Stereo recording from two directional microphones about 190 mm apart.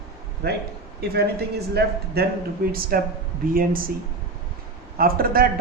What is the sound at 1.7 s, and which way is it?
Speech, 55° right (ahead or behind).